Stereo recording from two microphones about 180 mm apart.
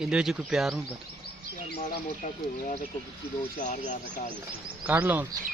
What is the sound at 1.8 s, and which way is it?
Speech, 45° left (ahead or behind).